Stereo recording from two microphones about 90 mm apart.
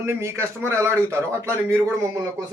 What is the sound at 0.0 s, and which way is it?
A man's voice, 30° right (ahead or behind).